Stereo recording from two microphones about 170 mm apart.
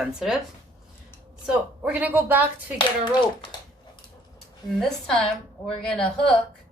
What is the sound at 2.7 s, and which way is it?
Speech, 25° left (ahead or behind).